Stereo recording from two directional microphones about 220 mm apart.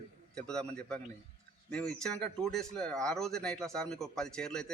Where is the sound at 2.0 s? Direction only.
5° left (ahead or behind).